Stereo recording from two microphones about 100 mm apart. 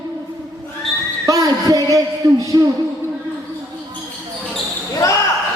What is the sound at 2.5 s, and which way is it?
Speech, 40° right (ahead or behind).